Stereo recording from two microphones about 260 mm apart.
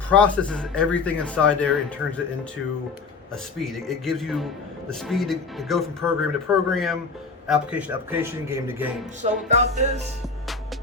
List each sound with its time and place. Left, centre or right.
0.1 s speech: centre
3.6 s a man's voice: centre
9.2 s music: right